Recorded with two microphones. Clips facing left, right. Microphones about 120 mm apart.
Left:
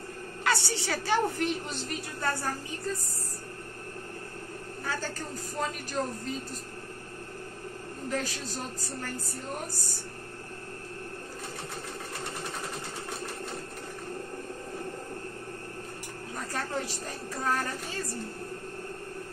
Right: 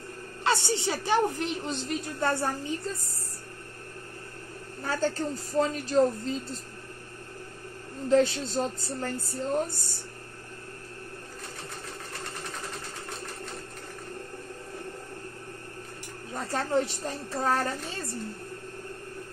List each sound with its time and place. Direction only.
0.4 s a woman's voice: 25° right (ahead or behind)
4.8 s a woman's voice: 30° right (ahead or behind)
8.1 s a woman's voice: 25° right (ahead or behind)
16.4 s a woman's voice: 25° right (ahead or behind)